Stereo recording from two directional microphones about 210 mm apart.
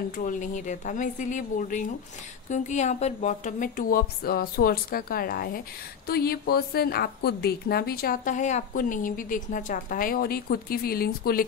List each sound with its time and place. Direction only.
0.1 s a woman's voice: 40° left (ahead or behind)